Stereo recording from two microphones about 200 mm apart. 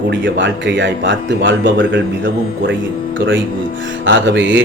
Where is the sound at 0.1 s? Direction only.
65° right (ahead or behind).